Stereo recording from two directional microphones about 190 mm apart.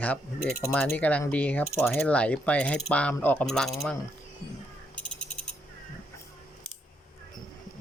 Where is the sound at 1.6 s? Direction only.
Centre (ahead or behind).